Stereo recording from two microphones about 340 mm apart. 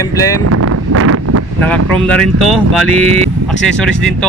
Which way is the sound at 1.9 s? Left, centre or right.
Centre.